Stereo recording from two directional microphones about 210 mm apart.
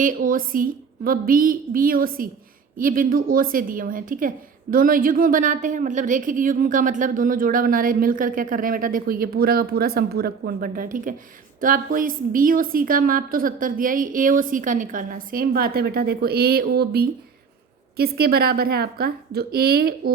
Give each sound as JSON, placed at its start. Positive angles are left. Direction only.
{"t": 0.0, "sound": "a woman's voice", "side_deg": -40}